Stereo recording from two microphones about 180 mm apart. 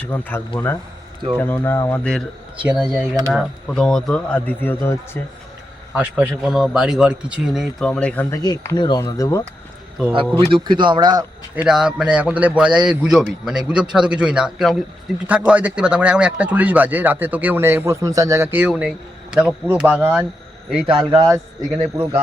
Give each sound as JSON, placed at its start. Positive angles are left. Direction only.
{"t": 0.0, "sound": "a man's voice", "side_deg": 10}
{"t": 5.9, "sound": "a man's voice", "side_deg": -5}
{"t": 8.4, "sound": "speech", "side_deg": 20}
{"t": 10.1, "sound": "speech", "side_deg": -30}
{"t": 11.5, "sound": "a man's voice", "side_deg": -5}
{"t": 20.8, "sound": "speech", "side_deg": -25}